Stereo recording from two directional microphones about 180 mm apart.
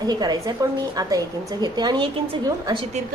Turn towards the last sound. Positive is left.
turn(degrees=-30)  # may be behind; listen again after turning